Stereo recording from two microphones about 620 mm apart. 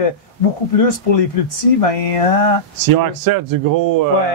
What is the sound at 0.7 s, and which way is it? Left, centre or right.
Speech, left.